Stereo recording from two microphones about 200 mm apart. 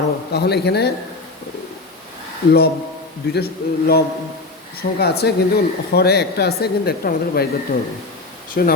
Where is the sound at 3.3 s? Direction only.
50° left (ahead or behind).